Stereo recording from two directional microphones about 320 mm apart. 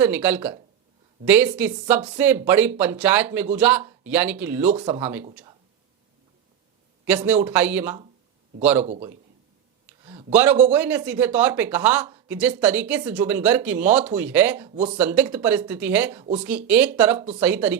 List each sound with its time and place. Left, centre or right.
0.0 s speech: centre
7.0 s a man's voice: centre
10.0 s a sound: centre
10.3 s speech: centre